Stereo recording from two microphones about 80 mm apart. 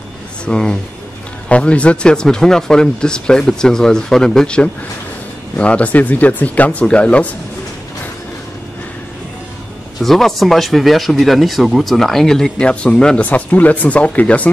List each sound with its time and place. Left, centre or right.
0.5 s speech: centre
9.9 s speech: centre